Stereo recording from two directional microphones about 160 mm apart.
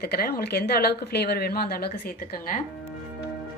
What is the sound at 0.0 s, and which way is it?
Speech, 70° left (ahead or behind).